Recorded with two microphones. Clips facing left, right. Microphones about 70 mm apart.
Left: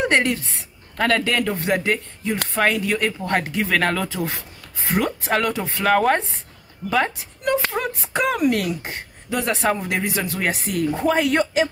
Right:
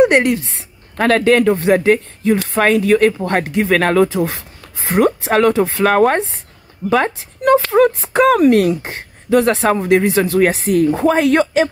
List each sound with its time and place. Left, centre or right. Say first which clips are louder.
0.0 s a sound: right 8 dB; centre
1.0 s speech: right 8 dB; right
2.6 s a woman's voice: right 4 dB; right
3.1 s speech: right 6 dB; right
4.1 s speech: right 8 dB; right
5.9 s a woman's voice: right 4 dB; right
6.1 s speech: right 5 dB; right
6.9 s a woman's voice: right 6 dB; right